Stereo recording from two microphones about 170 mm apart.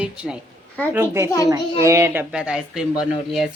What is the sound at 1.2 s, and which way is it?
Speech, 20° left (ahead or behind).